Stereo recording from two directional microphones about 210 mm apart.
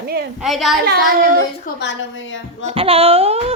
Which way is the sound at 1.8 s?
60° left (ahead or behind).